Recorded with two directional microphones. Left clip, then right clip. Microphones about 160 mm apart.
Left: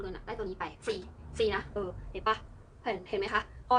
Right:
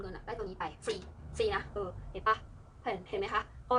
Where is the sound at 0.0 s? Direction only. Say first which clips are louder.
Left 2 dB; 20° left (ahead or behind).